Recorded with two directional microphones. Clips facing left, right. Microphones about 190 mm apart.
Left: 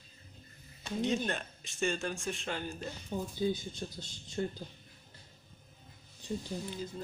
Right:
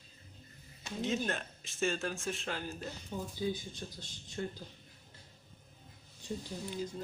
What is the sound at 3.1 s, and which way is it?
Speech, 25° left (ahead or behind).